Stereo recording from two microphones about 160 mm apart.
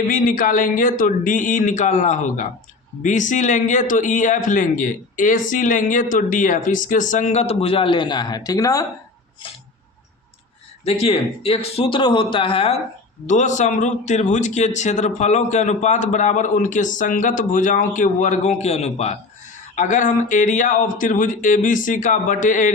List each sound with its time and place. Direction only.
0.1 s a man's voice: 60° left (ahead or behind); by 8.9 s 20° left (ahead or behind)
10.8 s speech: 40° left (ahead or behind)
13.2 s a man's voice: 50° left (ahead or behind)